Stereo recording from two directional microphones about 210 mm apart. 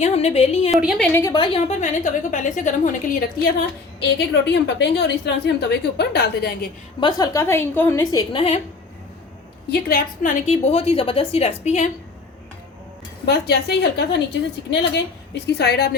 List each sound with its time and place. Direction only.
0.0 s a woman's voice: 30° left (ahead or behind)
0.7 s a woman's voice: centre (ahead or behind)
1.2 s a woman's voice: 20° left (ahead or behind); by 3.5 s 40° left (ahead or behind)
4.0 s a woman's voice: 55° left (ahead or behind)
7.0 s a woman's voice: 15° left (ahead or behind)
9.6 s a woman's voice: 45° left (ahead or behind)
10.4 s a woman's voice: 30° left (ahead or behind)
13.2 s a woman's voice: 50° left (ahead or behind)
15.4 s a woman's voice: 50° left (ahead or behind)